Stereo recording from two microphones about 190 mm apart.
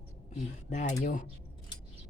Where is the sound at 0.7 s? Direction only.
40° left (ahead or behind).